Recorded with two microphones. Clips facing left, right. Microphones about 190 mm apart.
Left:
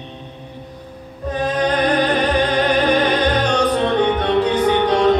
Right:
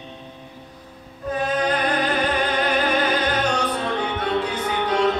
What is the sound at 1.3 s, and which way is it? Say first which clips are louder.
Music: left 3 dB; 35° left (ahead or behind).